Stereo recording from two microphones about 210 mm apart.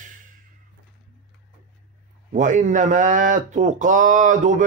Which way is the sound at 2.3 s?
35° right (ahead or behind).